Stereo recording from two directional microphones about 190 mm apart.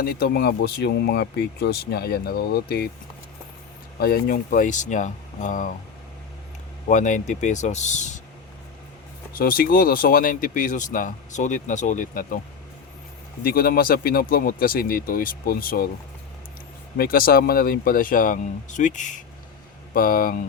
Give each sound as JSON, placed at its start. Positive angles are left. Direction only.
{"t": 0.0, "sound": "speech", "side_deg": 55}
{"t": 4.0, "sound": "speech", "side_deg": 50}
{"t": 6.8, "sound": "speech", "side_deg": 40}
{"t": 9.3, "sound": "speech", "side_deg": 50}
{"t": 13.4, "sound": "speech", "side_deg": 50}
{"t": 17.0, "sound": "speech", "side_deg": 50}